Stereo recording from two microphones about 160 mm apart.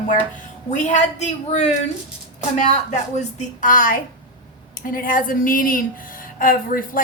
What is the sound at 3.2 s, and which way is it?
A woman's voice, 50° left (ahead or behind).